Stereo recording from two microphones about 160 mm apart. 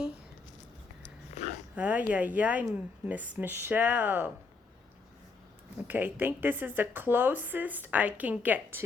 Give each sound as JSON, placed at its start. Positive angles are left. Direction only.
{"t": 1.4, "sound": "dog", "side_deg": 40}
{"t": 1.7, "sound": "speech", "side_deg": -10}
{"t": 5.9, "sound": "speech", "side_deg": -10}